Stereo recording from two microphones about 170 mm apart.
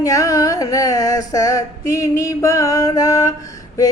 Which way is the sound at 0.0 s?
20° left (ahead or behind).